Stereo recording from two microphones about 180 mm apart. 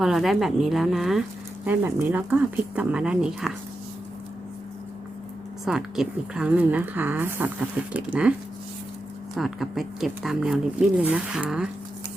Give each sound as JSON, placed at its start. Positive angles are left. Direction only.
{"t": 0.0, "sound": "a woman's voice", "side_deg": 0}
{"t": 5.6, "sound": "a woman's voice", "side_deg": -5}
{"t": 9.3, "sound": "speech", "side_deg": 0}